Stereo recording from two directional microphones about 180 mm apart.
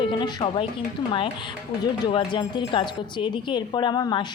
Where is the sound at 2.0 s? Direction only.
25° left (ahead or behind).